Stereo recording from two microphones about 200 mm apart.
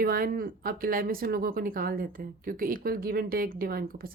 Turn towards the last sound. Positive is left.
turn(degrees=-50)  # may be behind; listen again after turning